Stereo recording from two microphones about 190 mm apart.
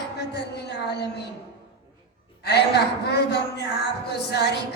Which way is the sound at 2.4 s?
60° left (ahead or behind).